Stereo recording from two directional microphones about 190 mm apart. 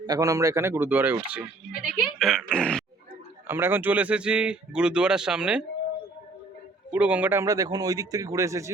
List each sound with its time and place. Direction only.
0.0 s a man's voice: 20° right (ahead or behind); by 2.8 s 5° left (ahead or behind)
3.4 s speech: 10° right (ahead or behind)
6.9 s a man's voice: 10° right (ahead or behind)